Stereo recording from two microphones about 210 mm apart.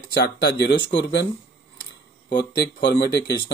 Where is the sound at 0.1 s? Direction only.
50° left (ahead or behind).